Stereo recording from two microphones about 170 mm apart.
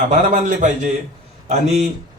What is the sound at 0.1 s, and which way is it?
A man's voice, 45° right (ahead or behind).